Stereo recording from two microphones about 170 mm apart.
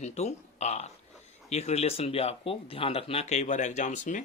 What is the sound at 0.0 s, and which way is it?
Speech, 40° left (ahead or behind).